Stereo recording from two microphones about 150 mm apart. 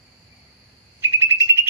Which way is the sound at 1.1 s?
15° right (ahead or behind).